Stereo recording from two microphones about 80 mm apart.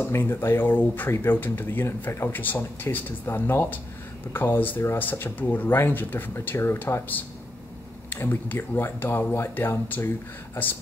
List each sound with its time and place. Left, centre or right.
0.2 s speech: left